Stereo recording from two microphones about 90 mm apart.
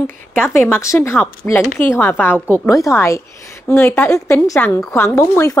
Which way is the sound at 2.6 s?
35° left (ahead or behind).